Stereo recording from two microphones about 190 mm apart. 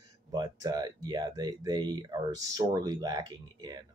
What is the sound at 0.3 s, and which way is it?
Speech, 20° right (ahead or behind).